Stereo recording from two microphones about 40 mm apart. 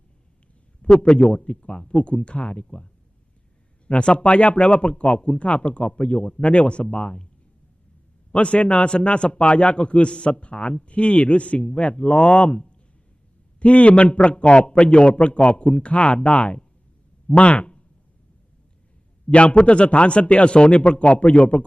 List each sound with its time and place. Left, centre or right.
0.8 s a man's voice: left
2.6 s a man's voice: centre
8.3 s a man's voice: left
17.2 s a sound: left
19.3 s a man's voice: left